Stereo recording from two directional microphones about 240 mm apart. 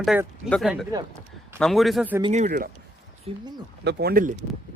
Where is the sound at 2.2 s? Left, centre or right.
Right.